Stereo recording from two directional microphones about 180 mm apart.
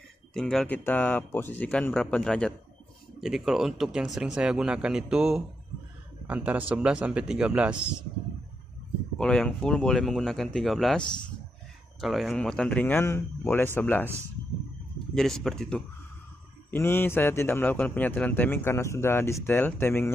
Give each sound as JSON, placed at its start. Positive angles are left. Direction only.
{"t": 0.3, "sound": "a man's voice", "side_deg": 0}
{"t": 9.2, "sound": "a man's voice", "side_deg": 5}
{"t": 15.1, "sound": "a man's voice", "side_deg": 0}